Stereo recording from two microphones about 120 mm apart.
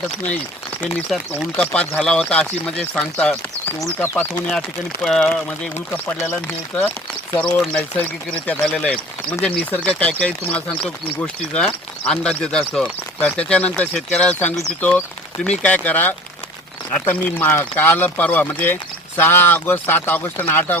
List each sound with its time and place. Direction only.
1.5 s speech: 10° left (ahead or behind)
7.3 s speech: 10° left (ahead or behind)